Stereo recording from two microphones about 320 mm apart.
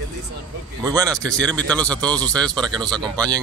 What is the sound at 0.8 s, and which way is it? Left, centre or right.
Speech, centre.